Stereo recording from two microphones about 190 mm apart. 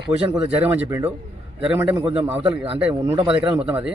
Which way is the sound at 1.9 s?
25° right (ahead or behind).